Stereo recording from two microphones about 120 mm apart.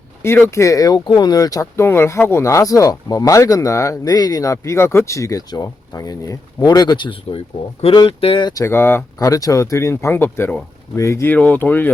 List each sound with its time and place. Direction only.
0.2 s speech: 20° left (ahead or behind); by 8.6 s 40° left (ahead or behind)
8.6 s speech: 20° left (ahead or behind)